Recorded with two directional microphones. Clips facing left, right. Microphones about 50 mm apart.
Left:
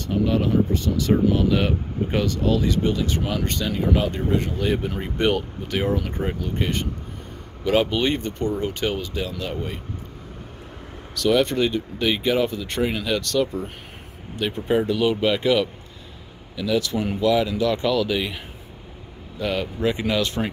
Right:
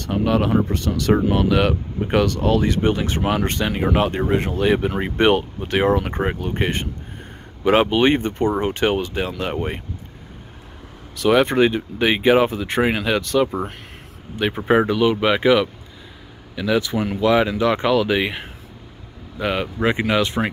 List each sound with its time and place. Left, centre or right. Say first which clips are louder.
0.0 s speech: right 2 dB; right
1.3 s speech: right 3 dB; right
2.2 s speech: right 3 dB; right
4.7 s speech: right 5 dB; right
5.2 s speech: right 5 dB; right
8.5 s speech: right 5 dB; right
11.1 s speech: right 4 dB; right
14.6 s speech: right 5 dB; right
15.0 s speech: right 3 dB; centre